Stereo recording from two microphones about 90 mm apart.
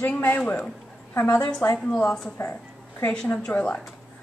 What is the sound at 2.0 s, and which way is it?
A woman's voice, 5° left (ahead or behind).